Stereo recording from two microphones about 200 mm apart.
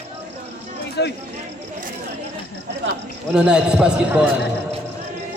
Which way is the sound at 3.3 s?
5° right (ahead or behind).